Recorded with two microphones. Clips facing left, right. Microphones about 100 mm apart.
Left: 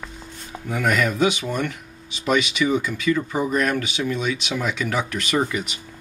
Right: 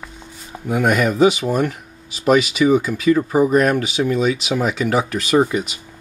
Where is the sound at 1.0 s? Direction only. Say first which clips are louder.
Right 6 dB; 35° right (ahead or behind).